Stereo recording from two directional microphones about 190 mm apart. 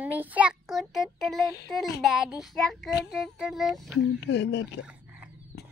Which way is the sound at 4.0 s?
65° left (ahead or behind).